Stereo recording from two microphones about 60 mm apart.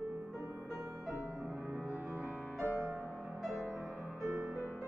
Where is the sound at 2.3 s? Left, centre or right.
Centre.